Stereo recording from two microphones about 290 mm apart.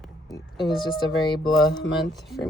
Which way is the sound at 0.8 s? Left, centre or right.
Centre.